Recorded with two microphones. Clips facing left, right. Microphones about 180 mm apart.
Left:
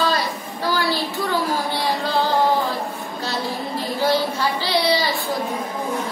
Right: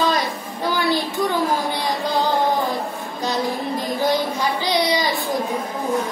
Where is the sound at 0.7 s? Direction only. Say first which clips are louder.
Right 1 dB; 20° right (ahead or behind).